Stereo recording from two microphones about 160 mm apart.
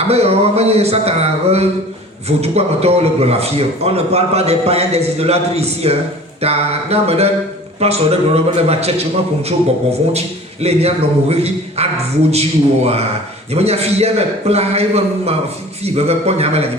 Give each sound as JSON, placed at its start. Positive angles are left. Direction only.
{"t": 0.1, "sound": "a man's voice", "side_deg": -40}